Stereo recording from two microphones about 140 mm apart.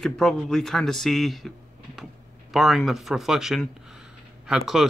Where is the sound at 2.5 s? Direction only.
Centre (ahead or behind).